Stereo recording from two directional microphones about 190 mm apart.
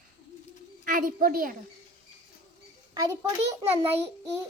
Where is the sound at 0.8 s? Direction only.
45° right (ahead or behind).